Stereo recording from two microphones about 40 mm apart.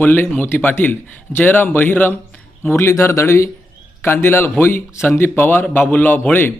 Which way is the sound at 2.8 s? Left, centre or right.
Left.